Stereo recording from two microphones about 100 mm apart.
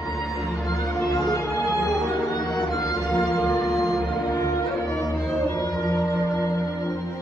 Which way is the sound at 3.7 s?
35° left (ahead or behind).